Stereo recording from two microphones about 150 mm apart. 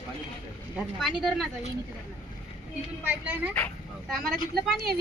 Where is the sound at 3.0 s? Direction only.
10° right (ahead or behind).